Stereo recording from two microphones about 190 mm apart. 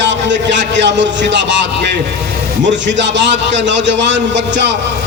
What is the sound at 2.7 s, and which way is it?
A man's voice, 70° right (ahead or behind).